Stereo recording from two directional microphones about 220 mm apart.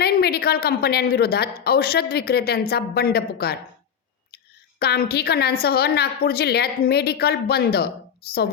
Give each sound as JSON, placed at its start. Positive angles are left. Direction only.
{"t": 0.0, "sound": "a woman's voice", "side_deg": 45}
{"t": 4.8, "sound": "a woman's voice", "side_deg": 45}